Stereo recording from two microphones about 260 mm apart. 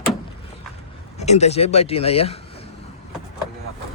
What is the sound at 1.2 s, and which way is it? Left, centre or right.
Speech, left.